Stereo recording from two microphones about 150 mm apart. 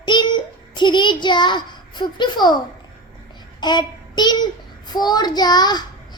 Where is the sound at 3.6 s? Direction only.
30° left (ahead or behind).